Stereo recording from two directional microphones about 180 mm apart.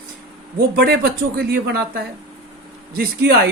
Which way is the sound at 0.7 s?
60° right (ahead or behind).